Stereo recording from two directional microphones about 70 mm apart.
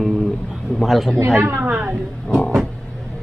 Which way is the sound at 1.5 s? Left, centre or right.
Right.